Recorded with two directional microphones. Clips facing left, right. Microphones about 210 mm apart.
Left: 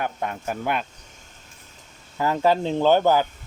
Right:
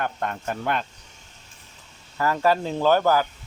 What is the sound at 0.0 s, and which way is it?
Speech, 5° left (ahead or behind).